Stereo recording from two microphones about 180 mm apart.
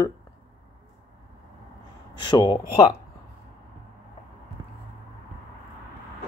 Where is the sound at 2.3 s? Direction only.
25° left (ahead or behind).